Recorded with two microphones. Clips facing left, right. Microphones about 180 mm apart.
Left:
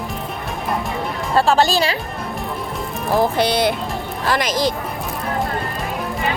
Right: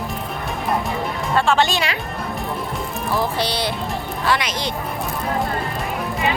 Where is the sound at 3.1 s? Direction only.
50° left (ahead or behind).